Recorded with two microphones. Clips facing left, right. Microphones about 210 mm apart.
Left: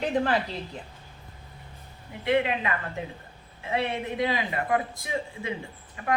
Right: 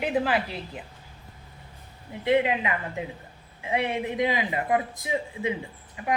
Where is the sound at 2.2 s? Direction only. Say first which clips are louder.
Right 2 dB; 20° right (ahead or behind).